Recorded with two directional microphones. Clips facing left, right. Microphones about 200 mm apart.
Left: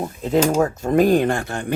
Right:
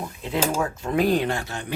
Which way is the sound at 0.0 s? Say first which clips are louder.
Left 7 dB; 40° left (ahead or behind).